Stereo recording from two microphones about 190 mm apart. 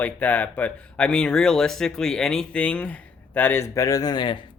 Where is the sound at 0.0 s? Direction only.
10° left (ahead or behind).